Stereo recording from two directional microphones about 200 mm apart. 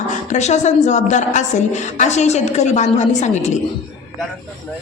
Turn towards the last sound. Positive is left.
turn(degrees=35)  # may be behind; listen again after turning